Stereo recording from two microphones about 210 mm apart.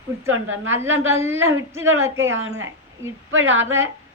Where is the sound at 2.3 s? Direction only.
70° right (ahead or behind).